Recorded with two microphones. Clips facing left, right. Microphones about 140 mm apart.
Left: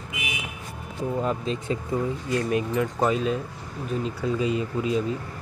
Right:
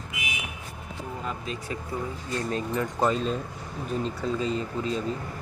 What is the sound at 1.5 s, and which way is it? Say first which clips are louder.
Speech: left 6 dB; 30° left (ahead or behind).